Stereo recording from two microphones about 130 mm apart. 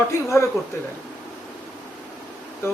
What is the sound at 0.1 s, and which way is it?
Speech, 20° left (ahead or behind).